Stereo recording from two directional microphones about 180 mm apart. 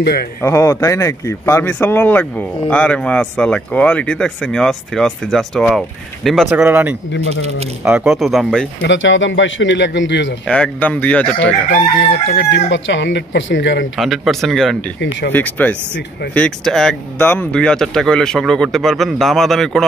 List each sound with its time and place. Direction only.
0.0 s speech: 60° left (ahead or behind)
0.4 s speech: 15° left (ahead or behind)
8.8 s speech: 90° left
10.4 s speech: 5° left (ahead or behind)
12.3 s speech: 70° left (ahead or behind); by 13.8 s 90° left
13.9 s speech: centre (ahead or behind)
15.0 s speech: 80° left
15.3 s speech: 10° left (ahead or behind)